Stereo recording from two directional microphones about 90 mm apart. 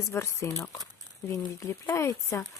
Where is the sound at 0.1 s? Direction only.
30° left (ahead or behind).